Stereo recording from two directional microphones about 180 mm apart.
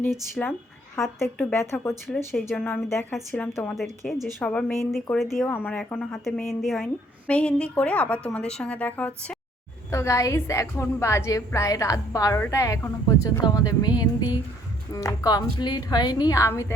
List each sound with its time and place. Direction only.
0.4 s a woman's voice: 5° left (ahead or behind)
2.1 s speech: centre (ahead or behind)
2.6 s a woman's voice: 10° left (ahead or behind)